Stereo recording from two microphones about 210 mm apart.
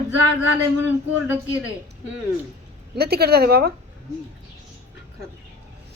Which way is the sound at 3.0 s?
50° right (ahead or behind).